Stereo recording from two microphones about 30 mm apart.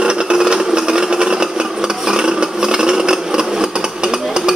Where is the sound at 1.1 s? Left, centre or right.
Right.